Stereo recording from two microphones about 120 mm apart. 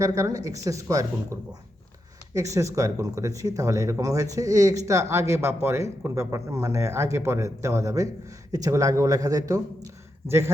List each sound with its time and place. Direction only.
0.0 s speech: 30° right (ahead or behind)